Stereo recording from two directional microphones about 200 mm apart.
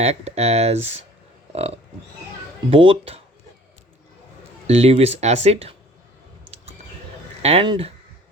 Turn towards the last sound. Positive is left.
turn(degrees=-25)  # may be behind; listen again after turning